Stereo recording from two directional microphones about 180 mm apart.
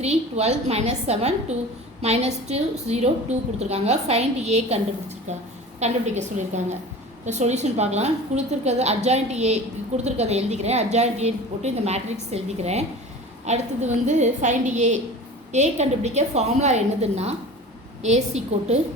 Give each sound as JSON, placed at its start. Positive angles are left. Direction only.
{"t": 0.0, "sound": "a woman's voice", "side_deg": -35}